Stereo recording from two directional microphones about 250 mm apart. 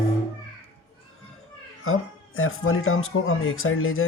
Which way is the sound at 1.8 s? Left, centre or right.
Left.